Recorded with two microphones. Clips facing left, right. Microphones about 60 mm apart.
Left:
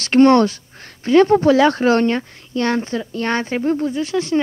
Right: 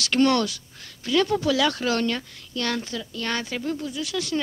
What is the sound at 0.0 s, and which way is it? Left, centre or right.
Speech, left.